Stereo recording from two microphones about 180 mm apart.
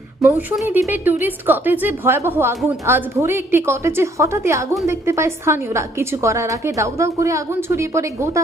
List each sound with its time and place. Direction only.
0.2 s a woman's voice: 10° right (ahead or behind)